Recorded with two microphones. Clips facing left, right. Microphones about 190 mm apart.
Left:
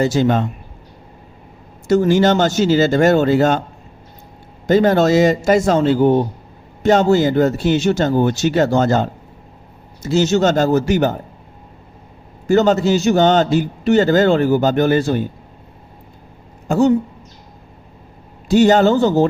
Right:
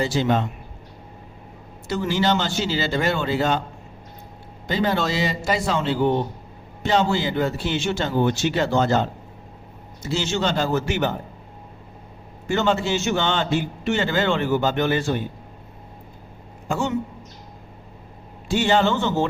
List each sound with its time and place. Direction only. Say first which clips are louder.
0.0 s a man's voice: left 6 dB; 45° left (ahead or behind)
1.9 s a man's voice: left 9 dB; 45° left (ahead or behind)
4.6 s a man's voice: left 10 dB; 45° left (ahead or behind)
12.5 s a man's voice: left 8 dB; 40° left (ahead or behind)
16.6 s a man's voice: left 10 dB; 40° left (ahead or behind)
18.4 s a man's voice: left 8 dB; 40° left (ahead or behind)